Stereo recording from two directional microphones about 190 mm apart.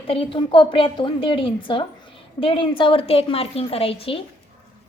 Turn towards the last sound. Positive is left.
turn(degrees=30)  # may be behind; listen again after turning